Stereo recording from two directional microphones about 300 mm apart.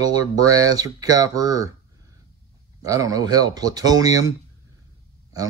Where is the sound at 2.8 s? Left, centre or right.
Centre.